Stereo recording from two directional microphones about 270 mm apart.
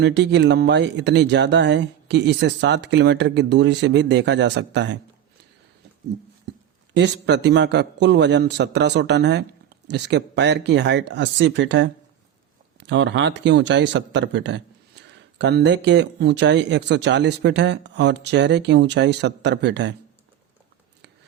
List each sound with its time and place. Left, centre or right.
0.0 s a man's voice: right
6.9 s a man's voice: right
12.9 s a man's voice: right